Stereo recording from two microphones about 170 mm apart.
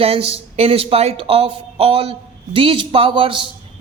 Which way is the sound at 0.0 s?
35° right (ahead or behind).